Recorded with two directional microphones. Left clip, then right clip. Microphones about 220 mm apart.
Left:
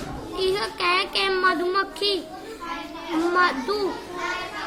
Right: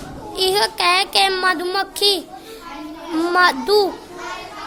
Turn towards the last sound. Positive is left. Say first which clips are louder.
# right 7 dB
turn(degrees=-50)  # may be behind; listen again after turning